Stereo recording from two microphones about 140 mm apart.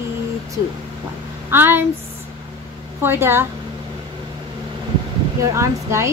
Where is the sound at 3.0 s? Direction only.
15° right (ahead or behind).